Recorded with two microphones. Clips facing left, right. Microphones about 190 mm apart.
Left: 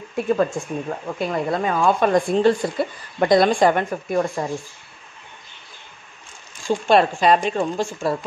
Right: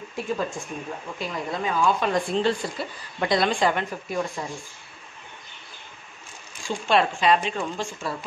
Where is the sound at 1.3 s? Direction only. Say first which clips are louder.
Left 5 dB; 55° left (ahead or behind).